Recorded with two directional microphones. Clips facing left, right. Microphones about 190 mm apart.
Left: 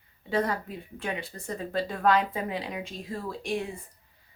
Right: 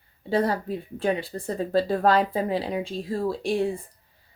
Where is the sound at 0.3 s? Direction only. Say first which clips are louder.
Right 4 dB; 35° right (ahead or behind).